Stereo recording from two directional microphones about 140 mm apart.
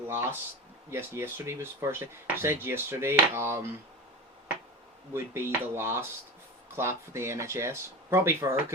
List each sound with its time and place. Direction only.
0.1 s speech: 15° right (ahead or behind)
5.1 s speech: 15° right (ahead or behind)